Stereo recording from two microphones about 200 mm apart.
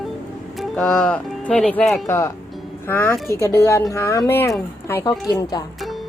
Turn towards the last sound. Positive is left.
turn(degrees=20)  # may be behind; listen again after turning